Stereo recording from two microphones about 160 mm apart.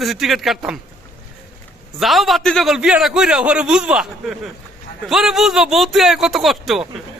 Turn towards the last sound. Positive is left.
turn(degrees=0)  # may be behind; listen again after turning